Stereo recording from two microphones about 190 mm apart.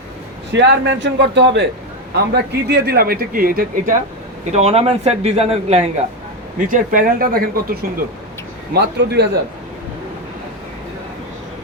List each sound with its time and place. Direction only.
0.5 s a man's voice: 70° right (ahead or behind); by 3.9 s 50° right (ahead or behind)
4.5 s speech: 30° right (ahead or behind)
6.7 s speech: 45° right (ahead or behind); by 9.2 s 60° right (ahead or behind)